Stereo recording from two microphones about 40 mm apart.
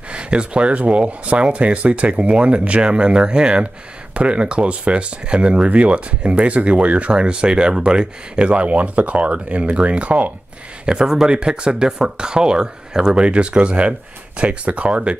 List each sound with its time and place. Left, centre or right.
0.1 s speech: right
10.9 s speech: centre